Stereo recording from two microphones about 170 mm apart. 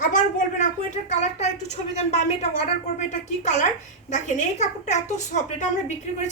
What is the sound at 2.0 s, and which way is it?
A woman's voice, 40° left (ahead or behind).